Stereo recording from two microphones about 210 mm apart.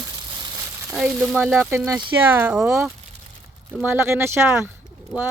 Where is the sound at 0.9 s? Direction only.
5° right (ahead or behind).